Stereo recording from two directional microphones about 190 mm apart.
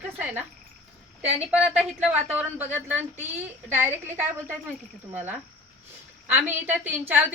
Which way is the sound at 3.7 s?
10° right (ahead or behind).